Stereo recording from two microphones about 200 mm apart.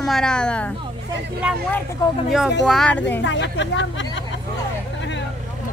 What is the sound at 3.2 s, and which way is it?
Speech, 65° left (ahead or behind).